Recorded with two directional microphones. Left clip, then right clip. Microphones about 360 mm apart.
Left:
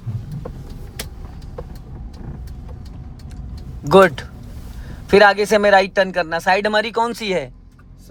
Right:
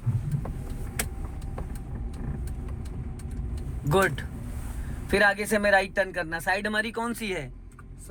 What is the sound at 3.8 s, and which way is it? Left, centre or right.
Speech, centre.